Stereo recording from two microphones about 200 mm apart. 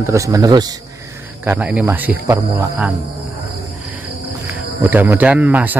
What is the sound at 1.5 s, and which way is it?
Speech, 5° right (ahead or behind).